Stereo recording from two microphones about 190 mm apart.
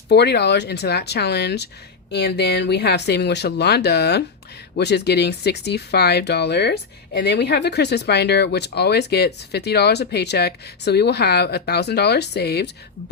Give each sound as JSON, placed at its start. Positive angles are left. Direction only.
{"t": 0.1, "sound": "speech", "side_deg": 60}